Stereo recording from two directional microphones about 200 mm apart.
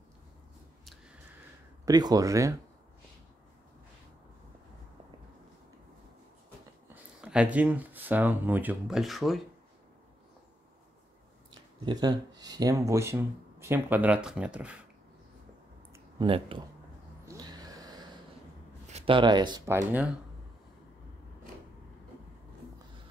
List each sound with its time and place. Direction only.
1.9 s speech: 20° right (ahead or behind)
7.2 s speech: 5° right (ahead or behind)
11.5 s speech: 20° right (ahead or behind)
15.9 s a sound: 25° right (ahead or behind)
17.3 s gasp: 20° right (ahead or behind)
18.9 s speech: 30° right (ahead or behind); by 20.1 s 10° right (ahead or behind)